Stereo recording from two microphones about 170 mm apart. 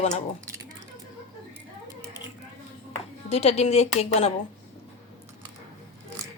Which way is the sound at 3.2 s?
35° left (ahead or behind).